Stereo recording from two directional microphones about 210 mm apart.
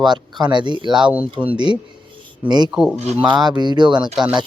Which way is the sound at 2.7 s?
5° right (ahead or behind).